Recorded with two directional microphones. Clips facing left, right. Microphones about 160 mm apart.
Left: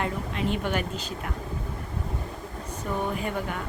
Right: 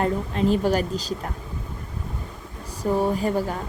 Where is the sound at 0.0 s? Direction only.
35° right (ahead or behind).